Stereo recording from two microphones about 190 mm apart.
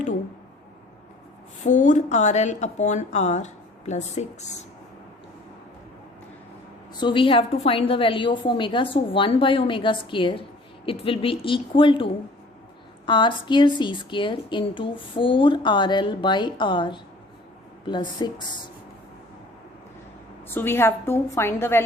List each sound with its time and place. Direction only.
1.6 s a woman's voice: 40° left (ahead or behind)
6.9 s a woman's voice: 25° left (ahead or behind)
20.5 s a woman's voice: 10° left (ahead or behind)